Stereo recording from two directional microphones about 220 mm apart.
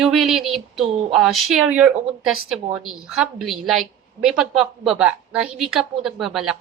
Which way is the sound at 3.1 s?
Centre (ahead or behind).